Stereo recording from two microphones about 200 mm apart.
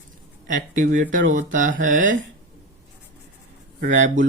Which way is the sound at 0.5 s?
40° right (ahead or behind).